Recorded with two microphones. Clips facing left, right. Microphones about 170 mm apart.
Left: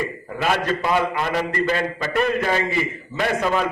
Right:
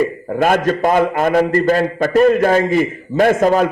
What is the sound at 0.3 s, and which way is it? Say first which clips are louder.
A man's voice: right 7 dB; 50° right (ahead or behind).